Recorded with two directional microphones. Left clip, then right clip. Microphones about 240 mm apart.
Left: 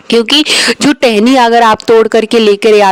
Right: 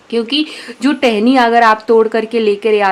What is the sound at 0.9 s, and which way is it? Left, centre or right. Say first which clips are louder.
Speech: even; left.